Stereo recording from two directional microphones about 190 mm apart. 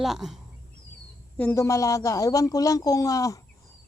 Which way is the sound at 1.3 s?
10° left (ahead or behind).